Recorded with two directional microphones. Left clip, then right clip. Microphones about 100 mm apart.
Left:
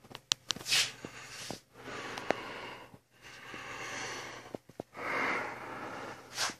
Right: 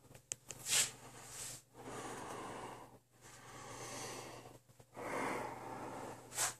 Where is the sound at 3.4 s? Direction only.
20° right (ahead or behind).